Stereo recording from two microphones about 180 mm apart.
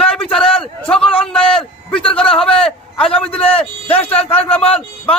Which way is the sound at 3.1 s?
30° left (ahead or behind).